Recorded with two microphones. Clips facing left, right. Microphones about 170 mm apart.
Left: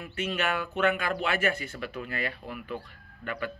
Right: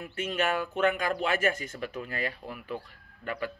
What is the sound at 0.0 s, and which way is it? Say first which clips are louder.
Speech: right 1 dB; 45° right (ahead or behind).